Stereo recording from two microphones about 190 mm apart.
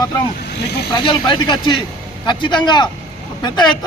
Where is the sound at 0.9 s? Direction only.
25° left (ahead or behind).